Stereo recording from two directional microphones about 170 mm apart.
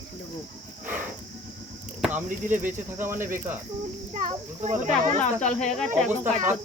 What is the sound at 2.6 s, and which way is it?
Speech, 15° right (ahead or behind).